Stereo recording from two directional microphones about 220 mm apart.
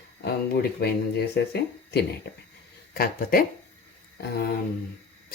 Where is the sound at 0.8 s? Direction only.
45° left (ahead or behind).